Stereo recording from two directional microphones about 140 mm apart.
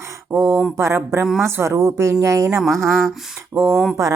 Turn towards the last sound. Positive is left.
turn(degrees=0)  # may be behind; listen again after turning